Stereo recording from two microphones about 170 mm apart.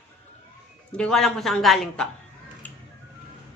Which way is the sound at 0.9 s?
5° left (ahead or behind).